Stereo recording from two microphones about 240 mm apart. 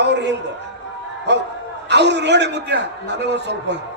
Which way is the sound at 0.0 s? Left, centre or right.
Right.